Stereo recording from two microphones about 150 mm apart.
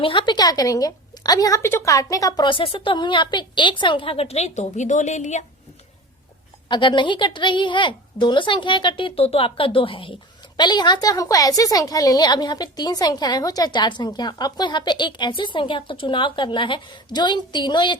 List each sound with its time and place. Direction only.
0.0 s a woman's voice: 35° left (ahead or behind); by 5.5 s 50° left (ahead or behind)
6.7 s a woman's voice: 30° left (ahead or behind)